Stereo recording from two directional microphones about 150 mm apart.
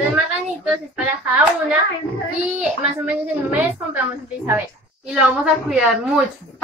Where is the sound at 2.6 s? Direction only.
10° right (ahead or behind).